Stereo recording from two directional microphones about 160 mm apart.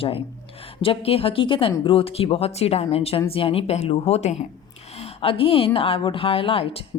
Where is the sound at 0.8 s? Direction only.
35° left (ahead or behind).